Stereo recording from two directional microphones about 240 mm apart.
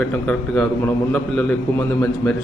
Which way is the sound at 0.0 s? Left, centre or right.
Centre.